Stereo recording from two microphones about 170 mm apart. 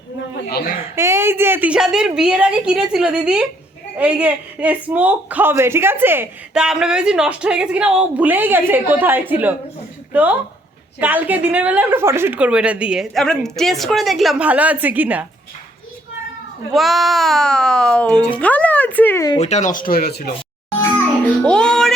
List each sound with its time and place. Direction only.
0.9 s a woman's voice: 15° right (ahead or behind)
16.7 s a woman's voice: centre (ahead or behind)
19.4 s speech: 40° left (ahead or behind); by 20.3 s 65° left (ahead or behind)
21.2 s music: 5° left (ahead or behind)